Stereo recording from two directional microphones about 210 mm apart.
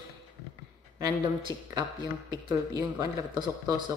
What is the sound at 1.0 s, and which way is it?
A man's voice, 20° right (ahead or behind).